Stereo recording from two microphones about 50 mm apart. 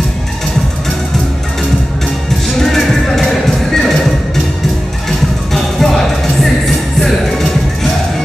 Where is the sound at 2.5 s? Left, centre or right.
Centre.